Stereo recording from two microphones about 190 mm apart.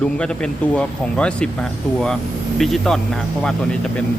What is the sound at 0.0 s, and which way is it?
A man's voice, 5° left (ahead or behind).